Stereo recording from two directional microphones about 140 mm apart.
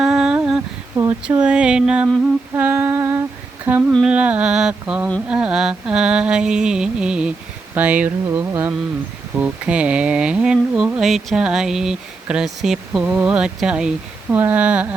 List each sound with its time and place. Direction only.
0.0 s a sound: 5° right (ahead or behind)
0.9 s speech: 15° right (ahead or behind)
2.6 s humming: 15° right (ahead or behind)
3.7 s speech: 15° right (ahead or behind)
5.3 s mantra: 5° right (ahead or behind)
7.8 s speech: 10° right (ahead or behind)